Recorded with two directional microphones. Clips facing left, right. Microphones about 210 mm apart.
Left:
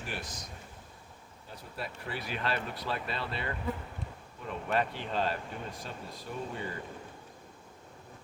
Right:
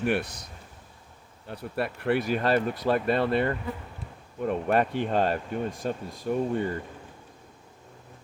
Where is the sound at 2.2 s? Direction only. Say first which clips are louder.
Right 10 dB; 45° right (ahead or behind).